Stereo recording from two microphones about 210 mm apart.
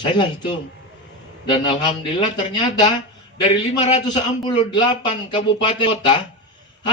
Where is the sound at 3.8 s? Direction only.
30° left (ahead or behind).